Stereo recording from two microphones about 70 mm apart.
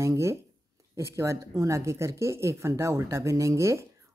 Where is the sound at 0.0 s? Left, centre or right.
Right.